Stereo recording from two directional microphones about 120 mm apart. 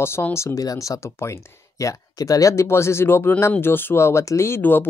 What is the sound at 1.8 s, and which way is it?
Speech, 30° left (ahead or behind).